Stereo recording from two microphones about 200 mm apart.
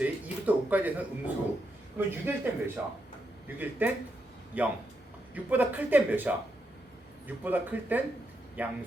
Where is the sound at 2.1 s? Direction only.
10° right (ahead or behind).